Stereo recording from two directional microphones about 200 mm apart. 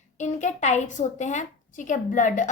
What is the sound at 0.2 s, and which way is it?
A woman's voice, 35° left (ahead or behind).